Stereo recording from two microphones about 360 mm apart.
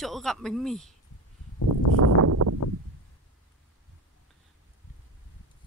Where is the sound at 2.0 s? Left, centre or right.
Right.